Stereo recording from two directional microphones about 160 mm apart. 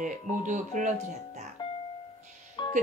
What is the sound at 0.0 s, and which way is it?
Speech, 50° right (ahead or behind).